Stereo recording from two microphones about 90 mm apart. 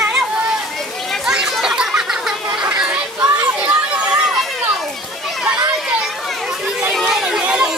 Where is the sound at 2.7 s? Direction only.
15° right (ahead or behind).